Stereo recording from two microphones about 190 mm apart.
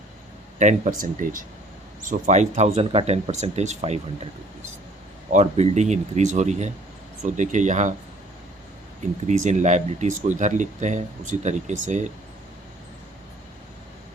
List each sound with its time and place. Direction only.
0.6 s speech: 40° right (ahead or behind)
5.3 s speech: 35° right (ahead or behind)
9.2 s speech: 40° right (ahead or behind)